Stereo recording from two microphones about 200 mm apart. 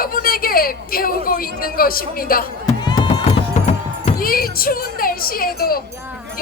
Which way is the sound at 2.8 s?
20° left (ahead or behind).